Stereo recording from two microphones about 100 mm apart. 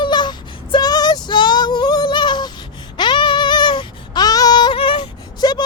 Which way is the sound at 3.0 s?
55° left (ahead or behind).